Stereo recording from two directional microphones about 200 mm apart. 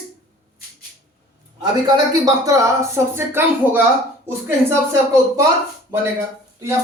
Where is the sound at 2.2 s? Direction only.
15° right (ahead or behind).